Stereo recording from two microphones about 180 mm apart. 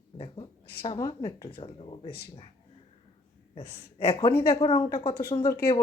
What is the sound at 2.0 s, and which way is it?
Speech, 60° left (ahead or behind).